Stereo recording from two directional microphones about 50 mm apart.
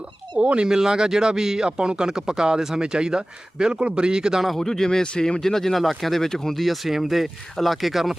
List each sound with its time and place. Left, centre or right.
0.3 s speech: right
4.4 s speech: centre